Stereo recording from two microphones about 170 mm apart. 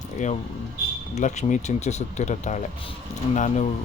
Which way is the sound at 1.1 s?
40° left (ahead or behind).